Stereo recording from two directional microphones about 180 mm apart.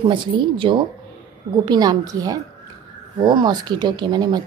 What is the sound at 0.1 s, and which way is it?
A woman's voice, 25° right (ahead or behind).